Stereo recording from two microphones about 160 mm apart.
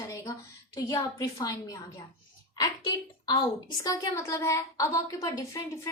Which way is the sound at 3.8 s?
20° left (ahead or behind).